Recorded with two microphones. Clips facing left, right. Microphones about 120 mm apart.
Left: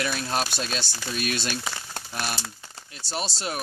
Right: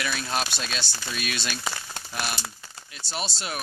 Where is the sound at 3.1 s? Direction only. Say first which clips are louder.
Left 2 dB; 35° left (ahead or behind).